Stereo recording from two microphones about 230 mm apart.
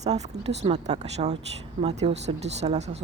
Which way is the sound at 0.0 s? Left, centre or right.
Right.